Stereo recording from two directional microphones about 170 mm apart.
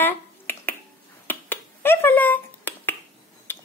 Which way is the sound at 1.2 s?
10° left (ahead or behind).